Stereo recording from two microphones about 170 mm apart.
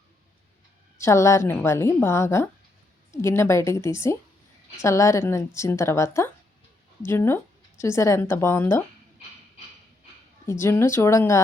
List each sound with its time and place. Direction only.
0.9 s speech: 15° left (ahead or behind)
10.4 s speech: 15° left (ahead or behind)